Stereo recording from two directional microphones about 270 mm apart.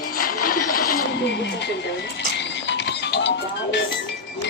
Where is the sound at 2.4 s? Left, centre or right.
Left.